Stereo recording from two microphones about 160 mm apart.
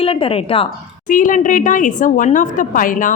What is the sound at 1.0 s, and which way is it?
A woman's voice, 55° left (ahead or behind).